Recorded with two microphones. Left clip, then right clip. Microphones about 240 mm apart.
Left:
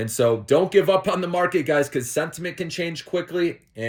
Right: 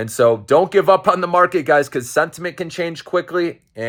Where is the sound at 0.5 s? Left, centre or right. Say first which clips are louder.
Right 5 dB; right.